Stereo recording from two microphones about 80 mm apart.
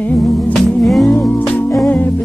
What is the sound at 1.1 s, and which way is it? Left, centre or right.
Music, left.